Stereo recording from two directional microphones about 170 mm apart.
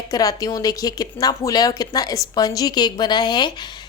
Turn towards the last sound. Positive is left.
turn(degrees=25)  # may be behind; listen again after turning